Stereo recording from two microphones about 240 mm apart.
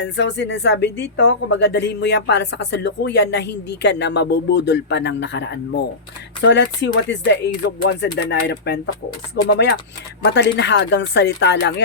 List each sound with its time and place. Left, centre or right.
0.0 s speech: left